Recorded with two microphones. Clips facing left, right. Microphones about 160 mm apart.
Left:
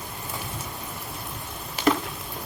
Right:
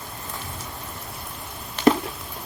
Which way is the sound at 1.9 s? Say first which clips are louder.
Right 4 dB; 35° right (ahead or behind).